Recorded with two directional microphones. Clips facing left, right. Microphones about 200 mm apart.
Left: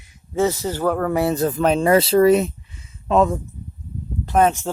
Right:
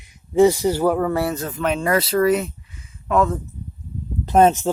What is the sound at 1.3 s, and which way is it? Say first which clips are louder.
Speech: left 5 dB; 35° left (ahead or behind).